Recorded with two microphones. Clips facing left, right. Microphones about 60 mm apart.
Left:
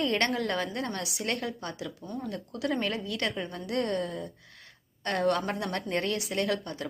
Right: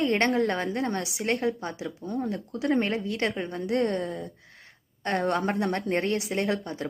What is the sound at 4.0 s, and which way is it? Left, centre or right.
Speech, centre.